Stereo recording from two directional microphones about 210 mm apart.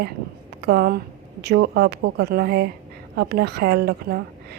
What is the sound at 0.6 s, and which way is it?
A woman's voice, 50° right (ahead or behind).